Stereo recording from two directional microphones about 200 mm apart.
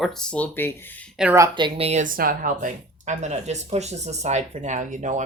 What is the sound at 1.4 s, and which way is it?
Speech, 25° right (ahead or behind).